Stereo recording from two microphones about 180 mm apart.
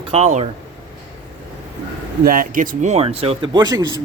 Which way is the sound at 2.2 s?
50° right (ahead or behind).